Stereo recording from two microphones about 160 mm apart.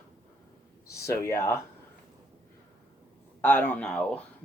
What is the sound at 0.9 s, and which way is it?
Speech, 20° left (ahead or behind).